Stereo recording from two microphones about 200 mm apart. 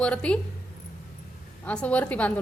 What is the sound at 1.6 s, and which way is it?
Speech, 5° left (ahead or behind).